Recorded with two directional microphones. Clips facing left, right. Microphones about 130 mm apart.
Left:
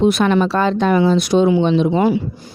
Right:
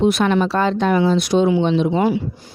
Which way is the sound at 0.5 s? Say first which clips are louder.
Left 1 dB; 90° left.